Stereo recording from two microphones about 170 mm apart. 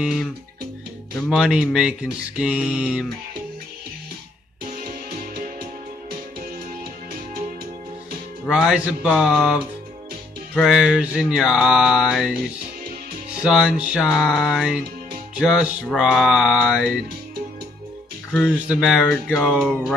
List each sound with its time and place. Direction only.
1.1 s speech: 5° right (ahead or behind)
5.1 s music: 60° right (ahead or behind)
8.5 s speech: 5° right (ahead or behind)
13.4 s speech: 5° right (ahead or behind)
18.3 s speech: 5° right (ahead or behind)